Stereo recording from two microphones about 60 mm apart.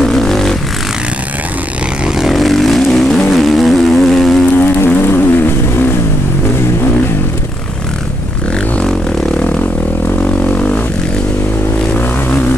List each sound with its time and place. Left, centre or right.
0.0 s vehicle: centre
2.1 s vehicle: centre
4.6 s vehicle: left
9.4 s vehicle: centre
10.2 s didgeridoo: centre